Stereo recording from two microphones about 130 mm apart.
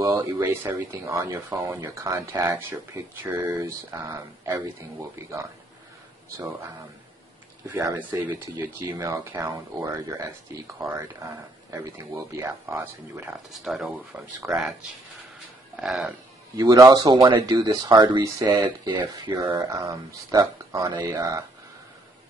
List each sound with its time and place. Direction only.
0.2 s speech: 20° right (ahead or behind)
7.6 s speech: 20° right (ahead or behind)
13.3 s speech: 5° right (ahead or behind)
16.5 s speech: 30° right (ahead or behind)